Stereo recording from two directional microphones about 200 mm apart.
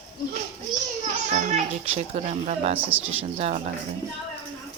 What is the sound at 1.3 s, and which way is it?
A child's voice, 35° right (ahead or behind).